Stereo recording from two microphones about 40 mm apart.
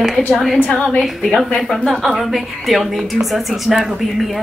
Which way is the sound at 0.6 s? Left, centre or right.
Centre.